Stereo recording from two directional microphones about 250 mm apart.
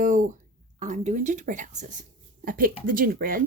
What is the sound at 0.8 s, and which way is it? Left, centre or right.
A woman's voice, right.